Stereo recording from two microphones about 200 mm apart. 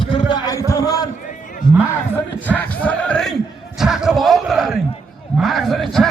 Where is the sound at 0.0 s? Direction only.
25° left (ahead or behind).